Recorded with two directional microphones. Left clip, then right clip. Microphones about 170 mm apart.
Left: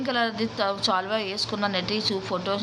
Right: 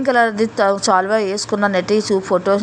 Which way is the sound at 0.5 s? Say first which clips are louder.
Right 10 dB; 45° right (ahead or behind).